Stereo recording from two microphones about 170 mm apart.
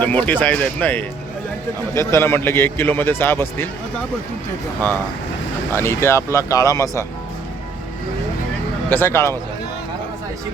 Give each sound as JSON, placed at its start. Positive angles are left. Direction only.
{"t": 0.0, "sound": "a man's voice", "side_deg": 10}
{"t": 5.7, "sound": "a man's voice", "side_deg": 15}
{"t": 8.9, "sound": "a man's voice", "side_deg": 15}